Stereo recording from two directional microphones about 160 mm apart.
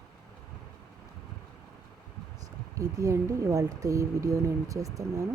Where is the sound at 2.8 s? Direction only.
20° right (ahead or behind).